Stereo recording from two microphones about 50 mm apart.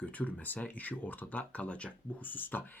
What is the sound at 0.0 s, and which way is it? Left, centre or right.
Speech, left.